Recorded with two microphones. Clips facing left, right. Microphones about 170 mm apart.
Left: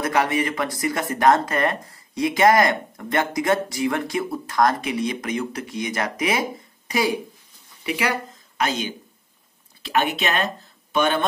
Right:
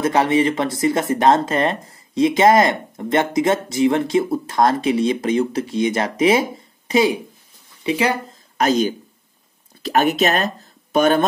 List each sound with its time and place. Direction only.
0.0 s speech: 25° right (ahead or behind)
8.5 s speech: 40° right (ahead or behind)